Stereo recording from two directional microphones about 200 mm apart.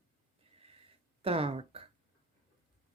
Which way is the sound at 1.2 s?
30° right (ahead or behind).